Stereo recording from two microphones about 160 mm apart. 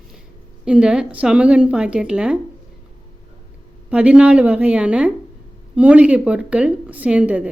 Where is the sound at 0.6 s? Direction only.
5° right (ahead or behind).